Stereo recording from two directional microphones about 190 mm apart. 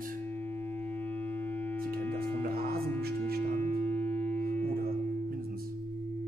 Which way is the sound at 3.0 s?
55° right (ahead or behind).